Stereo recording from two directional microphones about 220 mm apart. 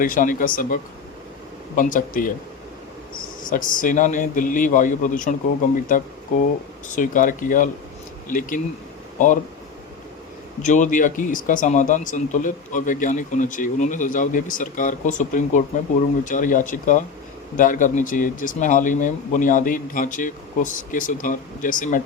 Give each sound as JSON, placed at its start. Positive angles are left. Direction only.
{"t": 0.0, "sound": "a man's voice", "side_deg": 40}
{"t": 3.4, "sound": "a man's voice", "side_deg": 40}
{"t": 10.6, "sound": "a man's voice", "side_deg": 35}